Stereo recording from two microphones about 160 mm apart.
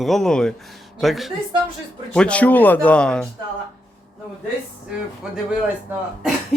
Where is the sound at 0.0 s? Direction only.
Centre (ahead or behind).